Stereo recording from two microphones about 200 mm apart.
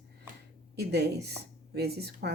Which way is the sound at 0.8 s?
55° right (ahead or behind).